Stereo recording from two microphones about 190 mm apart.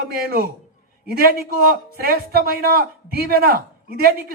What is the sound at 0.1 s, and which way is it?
A man's voice, 50° right (ahead or behind).